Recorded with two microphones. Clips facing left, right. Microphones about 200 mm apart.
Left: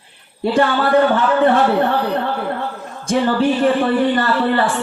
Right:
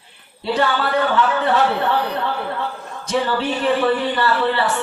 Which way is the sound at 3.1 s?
50° left (ahead or behind).